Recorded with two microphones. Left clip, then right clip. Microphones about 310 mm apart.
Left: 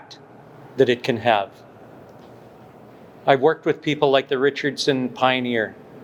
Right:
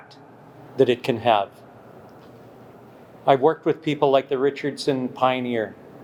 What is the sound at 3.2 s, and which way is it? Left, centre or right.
Speech, centre.